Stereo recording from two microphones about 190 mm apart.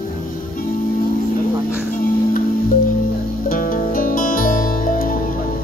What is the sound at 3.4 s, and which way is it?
Music, 45° left (ahead or behind).